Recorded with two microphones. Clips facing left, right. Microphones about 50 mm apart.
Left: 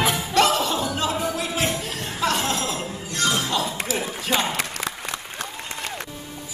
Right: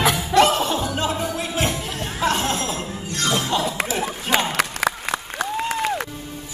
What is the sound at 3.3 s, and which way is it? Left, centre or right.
Shatter, right.